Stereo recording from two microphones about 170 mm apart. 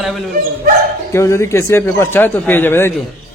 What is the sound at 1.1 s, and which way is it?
A man's voice, 15° left (ahead or behind).